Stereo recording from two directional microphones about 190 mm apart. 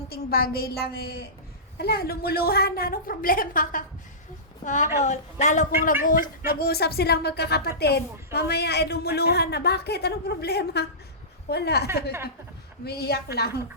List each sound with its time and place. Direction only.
0.1 s a man's voice: 55° left (ahead or behind)